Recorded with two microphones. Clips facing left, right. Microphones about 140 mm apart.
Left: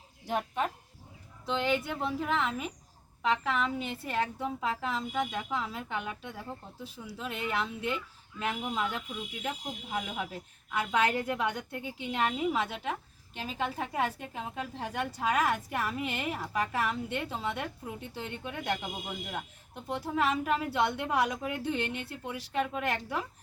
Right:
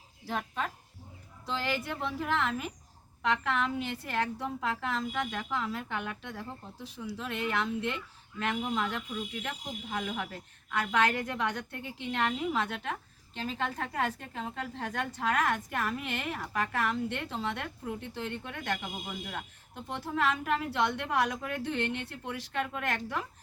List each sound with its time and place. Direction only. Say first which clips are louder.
0.3 s speech: left 3 dB; 20° left (ahead or behind)
1.5 s a woman's voice: left 3 dB; centre (ahead or behind)
19.9 s a woman's voice: left 1 dB; 10° left (ahead or behind)